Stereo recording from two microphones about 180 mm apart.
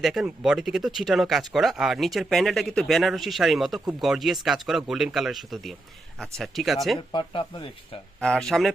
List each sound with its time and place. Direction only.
0.0 s speech: centre (ahead or behind)
7.1 s speech: 25° left (ahead or behind)
8.2 s speech: 5° left (ahead or behind)